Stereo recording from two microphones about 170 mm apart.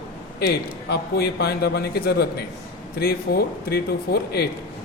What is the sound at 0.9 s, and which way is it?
Speech, 70° left (ahead or behind).